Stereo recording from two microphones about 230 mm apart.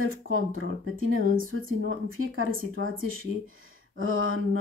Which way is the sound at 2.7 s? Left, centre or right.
Right.